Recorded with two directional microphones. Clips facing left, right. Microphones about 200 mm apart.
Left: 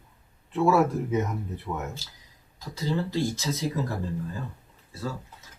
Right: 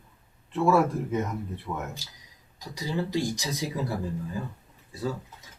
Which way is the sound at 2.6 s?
15° right (ahead or behind).